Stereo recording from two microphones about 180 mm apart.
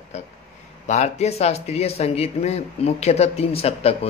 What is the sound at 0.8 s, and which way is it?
Speech, 40° left (ahead or behind).